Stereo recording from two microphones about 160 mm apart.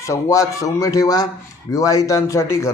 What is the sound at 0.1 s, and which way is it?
A man's voice, 20° left (ahead or behind).